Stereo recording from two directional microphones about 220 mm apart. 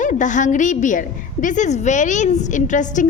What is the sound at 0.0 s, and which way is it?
A woman's voice, 35° left (ahead or behind).